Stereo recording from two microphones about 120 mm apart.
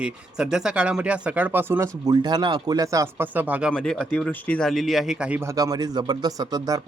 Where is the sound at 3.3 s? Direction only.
15° right (ahead or behind).